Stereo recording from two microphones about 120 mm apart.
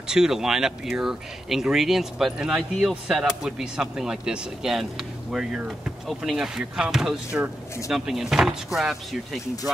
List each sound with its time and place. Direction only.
0.1 s speech: 5° right (ahead or behind)